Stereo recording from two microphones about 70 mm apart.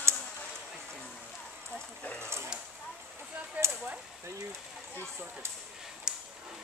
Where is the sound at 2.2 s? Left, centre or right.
Right.